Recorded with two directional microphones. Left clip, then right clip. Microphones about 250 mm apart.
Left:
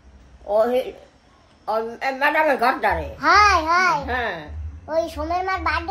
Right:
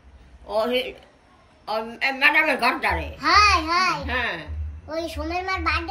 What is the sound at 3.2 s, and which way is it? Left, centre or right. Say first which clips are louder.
A child's voice: left 2 dB; left.